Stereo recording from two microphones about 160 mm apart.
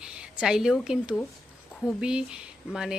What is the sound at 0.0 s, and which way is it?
A woman's voice, 5° right (ahead or behind).